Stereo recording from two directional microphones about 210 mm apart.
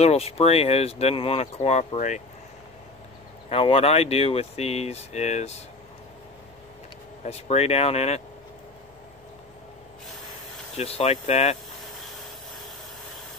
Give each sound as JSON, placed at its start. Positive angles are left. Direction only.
{"t": 0.0, "sound": "speech", "side_deg": 30}
{"t": 3.4, "sound": "speech", "side_deg": 30}
{"t": 7.2, "sound": "speech", "side_deg": 30}
{"t": 10.8, "sound": "speech", "side_deg": 30}